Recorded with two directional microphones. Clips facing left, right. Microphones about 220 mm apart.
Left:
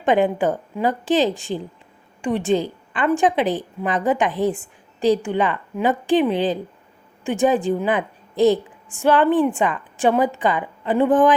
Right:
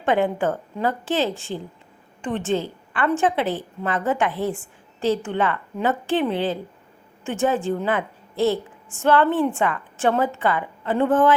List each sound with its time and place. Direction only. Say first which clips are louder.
0.0 s a woman's voice: left 3 dB; 15° left (ahead or behind)